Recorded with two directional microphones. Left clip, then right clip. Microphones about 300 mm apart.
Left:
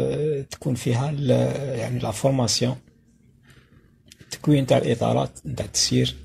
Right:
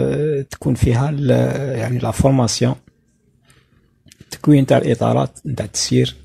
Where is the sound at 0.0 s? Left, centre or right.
Right.